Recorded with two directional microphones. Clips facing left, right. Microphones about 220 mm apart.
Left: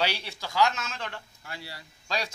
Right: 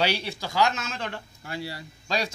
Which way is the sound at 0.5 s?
10° right (ahead or behind).